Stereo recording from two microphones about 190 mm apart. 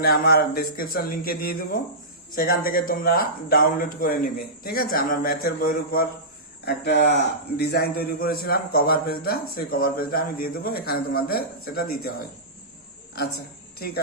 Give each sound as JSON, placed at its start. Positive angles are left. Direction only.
{"t": 0.0, "sound": "a man's voice", "side_deg": 55}
{"t": 6.7, "sound": "a man's voice", "side_deg": 60}
{"t": 13.7, "sound": "speech", "side_deg": 55}